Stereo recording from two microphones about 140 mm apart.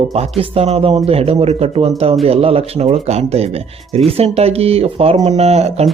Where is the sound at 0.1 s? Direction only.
45° right (ahead or behind).